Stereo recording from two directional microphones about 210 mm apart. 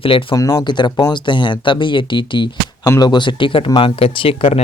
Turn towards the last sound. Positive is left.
turn(degrees=25)  # may be behind; listen again after turning